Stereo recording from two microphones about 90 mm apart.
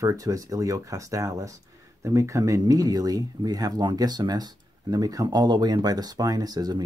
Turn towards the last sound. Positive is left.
turn(degrees=-50)  # may be behind; listen again after turning